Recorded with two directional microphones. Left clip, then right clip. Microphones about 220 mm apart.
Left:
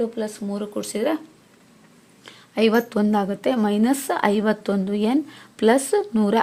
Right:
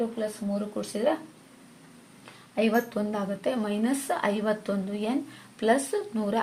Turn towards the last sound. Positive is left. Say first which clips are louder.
# left 8 dB
turn(degrees=50)  # may be behind; listen again after turning